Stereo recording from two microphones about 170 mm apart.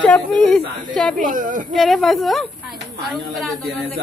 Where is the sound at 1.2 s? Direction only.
50° right (ahead or behind).